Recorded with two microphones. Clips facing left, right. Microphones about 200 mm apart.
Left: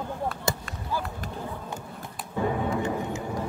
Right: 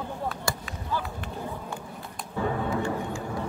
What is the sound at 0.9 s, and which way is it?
Run, 10° left (ahead or behind).